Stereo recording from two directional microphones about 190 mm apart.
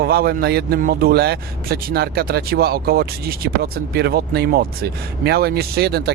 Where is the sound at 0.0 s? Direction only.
55° right (ahead or behind).